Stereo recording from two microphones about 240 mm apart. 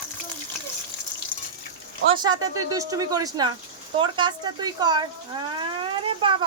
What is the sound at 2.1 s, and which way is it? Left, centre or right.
Speech, centre.